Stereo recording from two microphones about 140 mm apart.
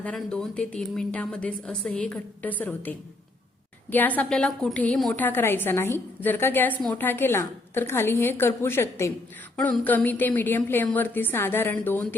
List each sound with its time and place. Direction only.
0.0 s a woman's voice: 10° left (ahead or behind)
3.9 s a woman's voice: 10° left (ahead or behind)
9.6 s a woman's voice: 10° left (ahead or behind)